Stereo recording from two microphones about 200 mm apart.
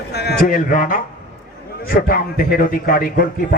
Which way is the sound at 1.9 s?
50° left (ahead or behind).